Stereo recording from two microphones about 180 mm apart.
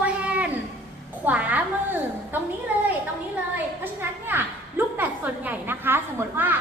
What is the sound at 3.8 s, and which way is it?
A woman's voice, 10° right (ahead or behind).